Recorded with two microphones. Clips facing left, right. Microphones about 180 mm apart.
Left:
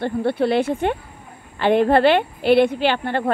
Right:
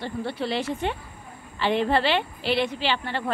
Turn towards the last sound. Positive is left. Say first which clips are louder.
# left 7 dB
turn(degrees=55)  # may be behind; listen again after turning